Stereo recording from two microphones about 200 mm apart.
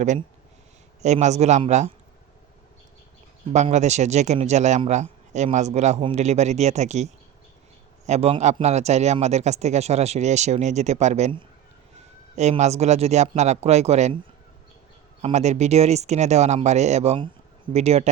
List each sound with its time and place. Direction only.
1.0 s a man's voice: 35° right (ahead or behind)
3.5 s a man's voice: 35° right (ahead or behind)
15.2 s a man's voice: 35° right (ahead or behind)